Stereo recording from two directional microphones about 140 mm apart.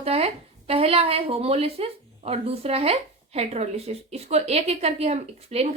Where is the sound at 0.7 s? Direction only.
45° right (ahead or behind).